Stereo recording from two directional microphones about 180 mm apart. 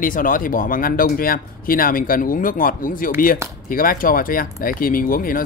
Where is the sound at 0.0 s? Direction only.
50° left (ahead or behind).